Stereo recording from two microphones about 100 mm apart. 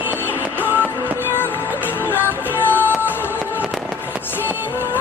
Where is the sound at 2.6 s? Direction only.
20° left (ahead or behind).